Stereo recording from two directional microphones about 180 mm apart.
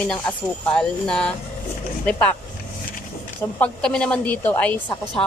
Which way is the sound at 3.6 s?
5° left (ahead or behind).